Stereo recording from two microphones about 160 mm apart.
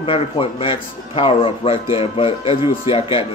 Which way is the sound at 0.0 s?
35° left (ahead or behind).